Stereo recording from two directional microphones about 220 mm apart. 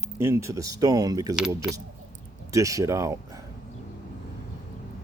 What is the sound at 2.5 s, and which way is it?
Speech, 15° right (ahead or behind).